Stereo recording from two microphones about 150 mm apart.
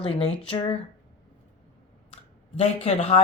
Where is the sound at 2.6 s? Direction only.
45° left (ahead or behind).